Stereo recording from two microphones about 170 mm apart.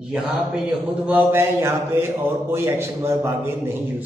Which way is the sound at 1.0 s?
10° right (ahead or behind).